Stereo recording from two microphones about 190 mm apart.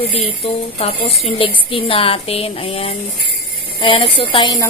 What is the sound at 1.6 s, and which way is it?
A woman's voice, 30° left (ahead or behind).